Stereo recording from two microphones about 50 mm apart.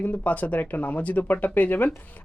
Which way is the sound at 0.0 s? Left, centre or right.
Left.